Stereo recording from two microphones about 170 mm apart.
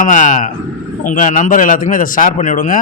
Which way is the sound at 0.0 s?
45° left (ahead or behind).